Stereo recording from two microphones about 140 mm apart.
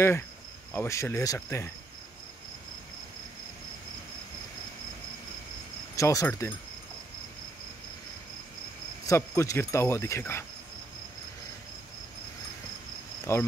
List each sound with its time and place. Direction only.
0.7 s speech: 20° left (ahead or behind)
5.9 s speech: 20° left (ahead or behind)
9.0 s speech: 20° left (ahead or behind)
13.3 s speech: 20° left (ahead or behind)